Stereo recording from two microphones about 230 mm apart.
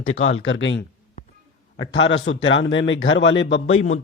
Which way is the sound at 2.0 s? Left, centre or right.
Left.